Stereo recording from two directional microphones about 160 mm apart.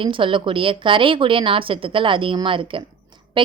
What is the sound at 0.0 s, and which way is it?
A woman's voice, 30° right (ahead or behind).